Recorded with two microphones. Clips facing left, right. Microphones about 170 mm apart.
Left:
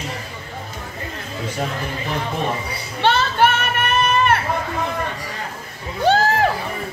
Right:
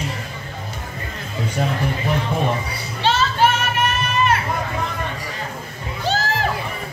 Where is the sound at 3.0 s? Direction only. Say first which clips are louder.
Left 1 dB; 60° left (ahead or behind).